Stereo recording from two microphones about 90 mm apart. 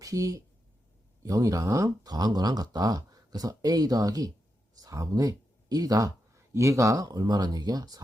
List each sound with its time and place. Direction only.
0.0 s a woman's voice: 40° right (ahead or behind)